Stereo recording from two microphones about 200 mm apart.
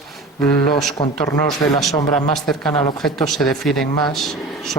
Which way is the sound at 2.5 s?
Centre (ahead or behind).